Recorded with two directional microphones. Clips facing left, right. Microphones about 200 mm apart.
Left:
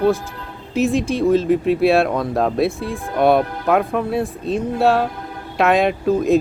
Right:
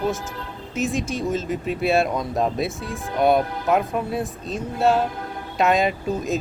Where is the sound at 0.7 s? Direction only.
Centre (ahead or behind).